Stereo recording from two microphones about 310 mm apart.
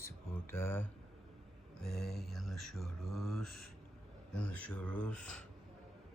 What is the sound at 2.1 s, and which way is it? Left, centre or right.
Music, centre.